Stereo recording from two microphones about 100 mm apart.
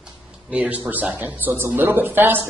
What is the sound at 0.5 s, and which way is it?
Speech, 15° right (ahead or behind).